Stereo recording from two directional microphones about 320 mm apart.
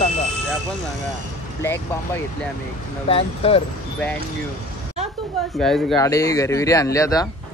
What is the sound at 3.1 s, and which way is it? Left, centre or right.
Speech, centre.